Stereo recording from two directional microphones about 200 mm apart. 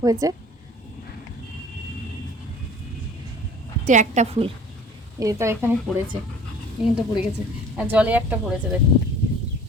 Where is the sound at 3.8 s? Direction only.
35° right (ahead or behind).